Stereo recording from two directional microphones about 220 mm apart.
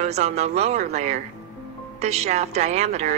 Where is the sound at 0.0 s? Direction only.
30° right (ahead or behind).